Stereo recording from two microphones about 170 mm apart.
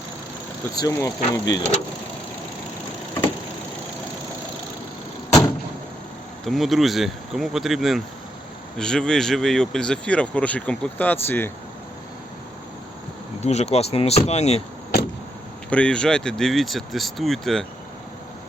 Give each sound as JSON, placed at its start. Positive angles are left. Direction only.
{"t": 0.8, "sound": "speech", "side_deg": 20}
{"t": 6.4, "sound": "speech", "side_deg": 0}
{"t": 13.4, "sound": "speech", "side_deg": 40}
{"t": 15.7, "sound": "speech", "side_deg": 5}